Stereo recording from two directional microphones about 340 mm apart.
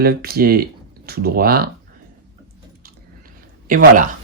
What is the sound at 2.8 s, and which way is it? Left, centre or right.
Chewing, right.